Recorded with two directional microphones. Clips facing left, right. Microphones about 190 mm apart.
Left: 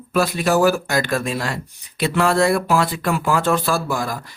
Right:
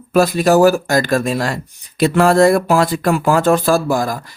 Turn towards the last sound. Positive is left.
turn(degrees=-40)  # may be behind; listen again after turning